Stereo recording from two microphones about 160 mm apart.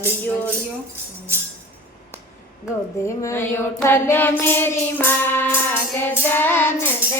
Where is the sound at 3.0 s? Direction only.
15° left (ahead or behind).